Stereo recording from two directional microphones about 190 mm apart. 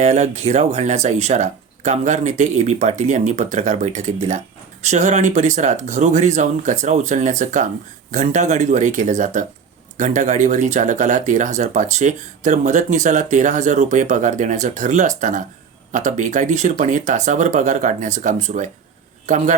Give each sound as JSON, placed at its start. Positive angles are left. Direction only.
{"t": 0.0, "sound": "speech", "side_deg": -35}